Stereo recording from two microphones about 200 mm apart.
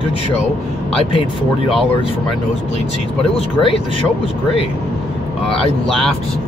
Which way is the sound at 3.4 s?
30° left (ahead or behind).